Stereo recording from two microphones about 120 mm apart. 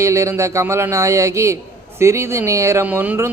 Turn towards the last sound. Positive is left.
turn(degrees=-20)  # may be behind; listen again after turning